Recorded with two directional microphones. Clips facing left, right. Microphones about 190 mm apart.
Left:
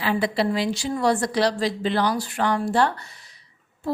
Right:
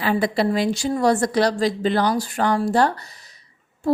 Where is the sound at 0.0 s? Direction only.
45° right (ahead or behind).